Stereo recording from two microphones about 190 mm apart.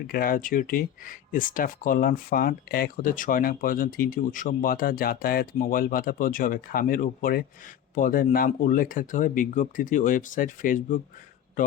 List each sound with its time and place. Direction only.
0.1 s speech: 50° left (ahead or behind)